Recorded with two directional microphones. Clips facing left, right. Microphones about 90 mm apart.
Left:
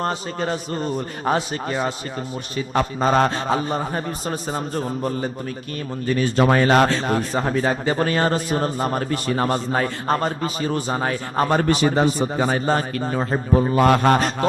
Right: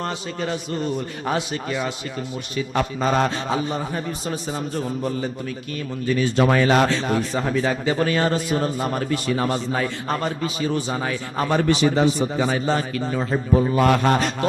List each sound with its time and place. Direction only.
0.0 s a man's voice: 40° left (ahead or behind)